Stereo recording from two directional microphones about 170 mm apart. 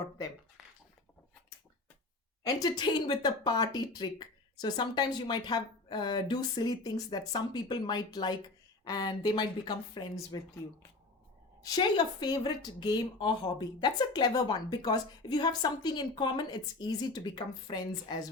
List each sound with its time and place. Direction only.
2.5 s speech: 25° left (ahead or behind)
11.7 s speech: 25° left (ahead or behind)